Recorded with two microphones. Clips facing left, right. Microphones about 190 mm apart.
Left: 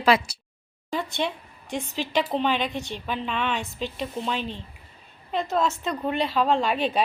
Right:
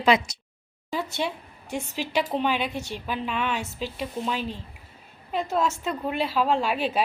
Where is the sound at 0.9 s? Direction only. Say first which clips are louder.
Left 1 dB; 10° right (ahead or behind).